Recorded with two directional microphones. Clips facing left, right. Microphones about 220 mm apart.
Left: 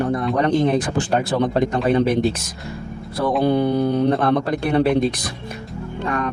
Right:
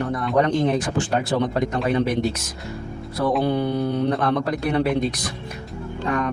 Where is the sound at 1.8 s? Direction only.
30° left (ahead or behind).